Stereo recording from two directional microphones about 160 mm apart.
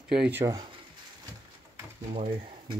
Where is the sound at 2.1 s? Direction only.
35° right (ahead or behind).